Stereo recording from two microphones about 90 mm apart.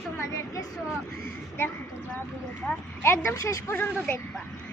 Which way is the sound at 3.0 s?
30° left (ahead or behind).